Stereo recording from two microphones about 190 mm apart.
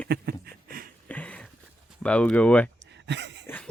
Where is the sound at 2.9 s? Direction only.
65° right (ahead or behind).